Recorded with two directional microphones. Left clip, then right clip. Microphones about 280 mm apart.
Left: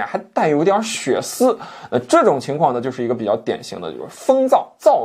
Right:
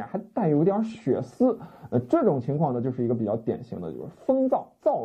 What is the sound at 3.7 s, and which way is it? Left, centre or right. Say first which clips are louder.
Speech: left 8 dB; left.